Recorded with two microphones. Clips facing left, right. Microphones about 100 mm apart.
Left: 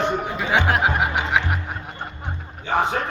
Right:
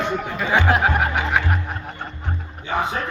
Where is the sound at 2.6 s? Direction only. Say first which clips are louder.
Left 2 dB; 30° left (ahead or behind).